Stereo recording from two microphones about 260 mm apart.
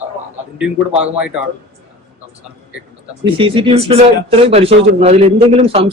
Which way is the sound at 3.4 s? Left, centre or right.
Right.